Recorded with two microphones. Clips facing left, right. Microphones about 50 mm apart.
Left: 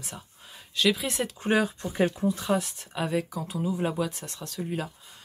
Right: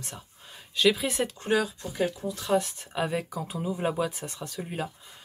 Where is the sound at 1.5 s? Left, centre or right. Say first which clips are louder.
Left 3 dB; left.